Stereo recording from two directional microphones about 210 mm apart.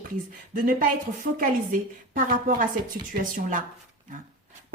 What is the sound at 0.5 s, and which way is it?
A woman's voice, 40° right (ahead or behind).